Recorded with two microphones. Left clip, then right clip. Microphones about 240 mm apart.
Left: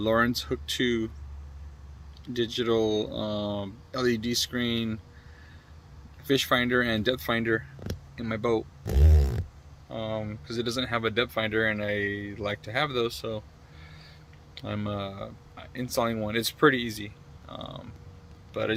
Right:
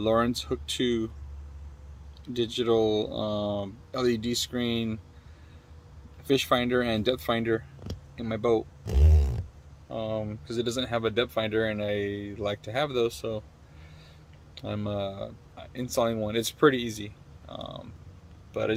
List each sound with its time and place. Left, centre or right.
0.0 s speech: centre
2.2 s speech: centre
6.2 s speech: centre
8.8 s a sound: left
9.9 s speech: centre
14.5 s speech: centre